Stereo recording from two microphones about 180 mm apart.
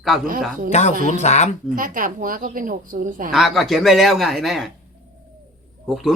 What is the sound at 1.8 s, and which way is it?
A woman's voice, 50° right (ahead or behind).